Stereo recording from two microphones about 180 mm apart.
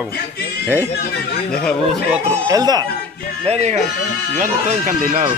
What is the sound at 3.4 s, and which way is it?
Speech, 40° right (ahead or behind).